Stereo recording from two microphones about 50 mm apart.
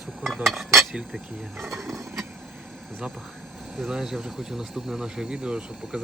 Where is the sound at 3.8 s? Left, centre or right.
Centre.